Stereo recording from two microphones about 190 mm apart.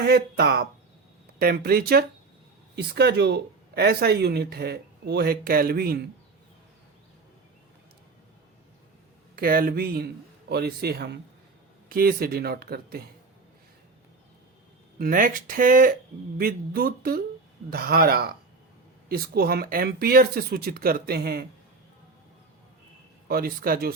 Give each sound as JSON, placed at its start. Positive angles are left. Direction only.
{"t": 0.0, "sound": "speech", "side_deg": -55}
{"t": 9.3, "sound": "speech", "side_deg": -50}
{"t": 14.9, "sound": "speech", "side_deg": -50}
{"t": 23.3, "sound": "speech", "side_deg": -50}